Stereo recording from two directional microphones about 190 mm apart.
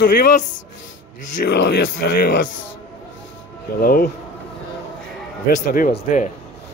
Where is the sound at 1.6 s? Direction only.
85° left.